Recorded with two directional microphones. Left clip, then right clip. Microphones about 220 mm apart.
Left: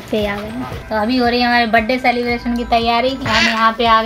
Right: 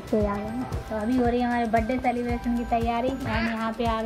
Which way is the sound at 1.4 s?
20° left (ahead or behind).